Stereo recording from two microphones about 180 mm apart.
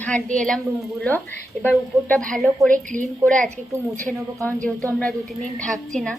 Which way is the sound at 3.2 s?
5° left (ahead or behind).